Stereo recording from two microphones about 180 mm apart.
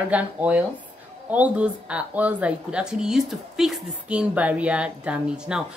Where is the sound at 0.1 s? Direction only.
10° right (ahead or behind).